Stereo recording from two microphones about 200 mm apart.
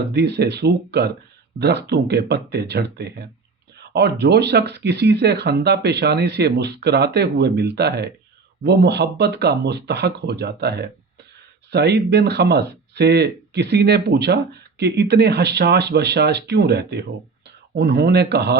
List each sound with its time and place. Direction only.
0.1 s speech: 55° right (ahead or behind)